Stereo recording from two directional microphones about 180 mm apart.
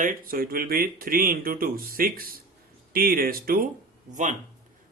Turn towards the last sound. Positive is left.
turn(degrees=-45)  # may be behind; listen again after turning